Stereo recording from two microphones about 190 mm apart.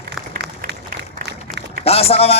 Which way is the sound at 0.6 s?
55° right (ahead or behind).